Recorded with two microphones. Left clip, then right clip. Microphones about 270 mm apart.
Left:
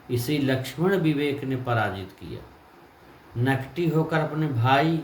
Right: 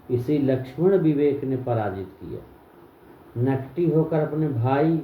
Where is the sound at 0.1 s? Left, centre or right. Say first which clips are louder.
Right 3 dB; left.